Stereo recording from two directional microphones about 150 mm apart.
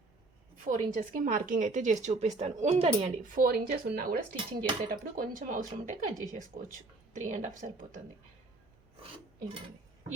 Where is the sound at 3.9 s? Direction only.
80° right; by 7.7 s 55° right (ahead or behind).